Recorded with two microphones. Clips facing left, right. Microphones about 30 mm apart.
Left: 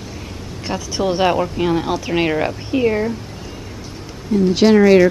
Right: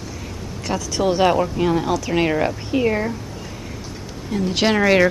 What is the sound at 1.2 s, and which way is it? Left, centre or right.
A woman's voice, centre.